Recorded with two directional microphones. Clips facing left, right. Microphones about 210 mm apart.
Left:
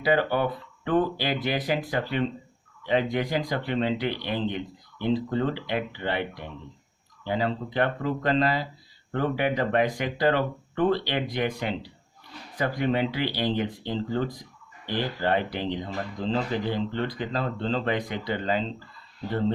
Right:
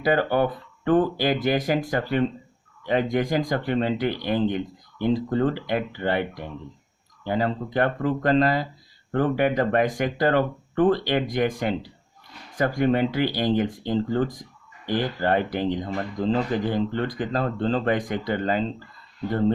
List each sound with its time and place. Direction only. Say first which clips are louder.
0.0 s speech: right 2 dB; 45° right (ahead or behind)